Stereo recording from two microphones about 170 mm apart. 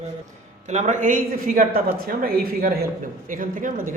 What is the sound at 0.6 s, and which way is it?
Speech, 45° right (ahead or behind).